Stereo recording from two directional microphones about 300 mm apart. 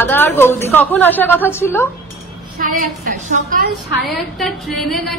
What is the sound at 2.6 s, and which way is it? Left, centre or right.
A woman's voice, right.